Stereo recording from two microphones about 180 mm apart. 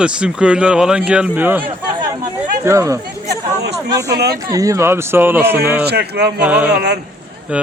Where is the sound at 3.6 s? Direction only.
65° right (ahead or behind).